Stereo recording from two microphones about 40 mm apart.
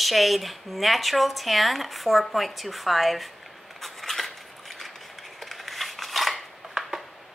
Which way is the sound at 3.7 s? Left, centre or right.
Centre.